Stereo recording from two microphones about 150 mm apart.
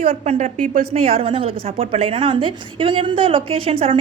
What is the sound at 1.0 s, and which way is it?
A woman's voice, 40° right (ahead or behind).